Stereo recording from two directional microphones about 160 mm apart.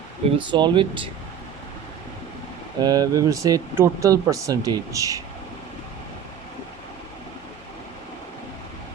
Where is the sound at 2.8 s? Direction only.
25° right (ahead or behind).